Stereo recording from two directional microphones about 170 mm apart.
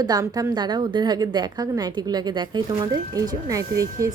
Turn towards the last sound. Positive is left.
turn(degrees=-20)  # may be behind; listen again after turning